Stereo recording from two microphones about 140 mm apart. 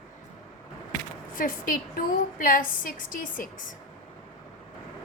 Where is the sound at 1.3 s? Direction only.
85° left.